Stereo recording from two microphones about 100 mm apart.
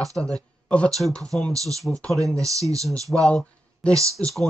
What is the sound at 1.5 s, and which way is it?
Speech, 35° right (ahead or behind).